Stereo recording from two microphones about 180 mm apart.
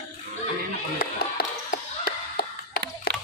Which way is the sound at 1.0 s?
55° left (ahead or behind).